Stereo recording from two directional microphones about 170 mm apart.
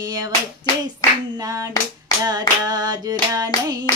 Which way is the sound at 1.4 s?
20° right (ahead or behind).